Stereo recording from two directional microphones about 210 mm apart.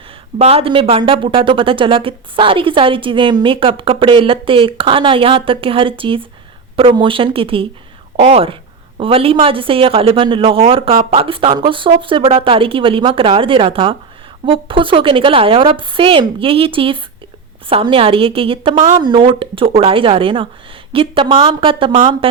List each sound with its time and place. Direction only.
0.3 s a woman's voice: 30° right (ahead or behind)